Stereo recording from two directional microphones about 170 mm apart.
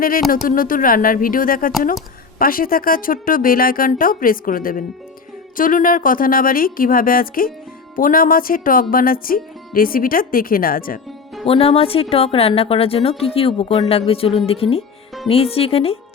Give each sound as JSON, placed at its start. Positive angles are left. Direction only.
{"t": 0.4, "sound": "speech", "side_deg": 55}
{"t": 11.4, "sound": "a woman's voice", "side_deg": 35}